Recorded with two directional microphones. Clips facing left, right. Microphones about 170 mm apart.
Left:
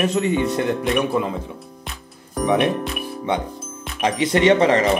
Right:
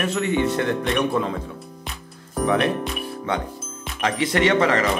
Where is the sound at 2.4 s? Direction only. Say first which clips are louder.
Left 2 dB; 15° left (ahead or behind).